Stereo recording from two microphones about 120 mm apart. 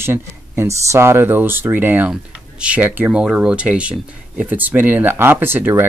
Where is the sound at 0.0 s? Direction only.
20° right (ahead or behind).